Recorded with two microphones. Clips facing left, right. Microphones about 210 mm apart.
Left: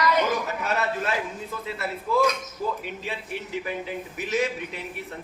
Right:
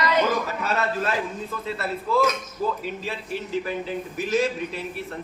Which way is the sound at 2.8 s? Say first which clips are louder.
Right 3 dB; 15° left (ahead or behind).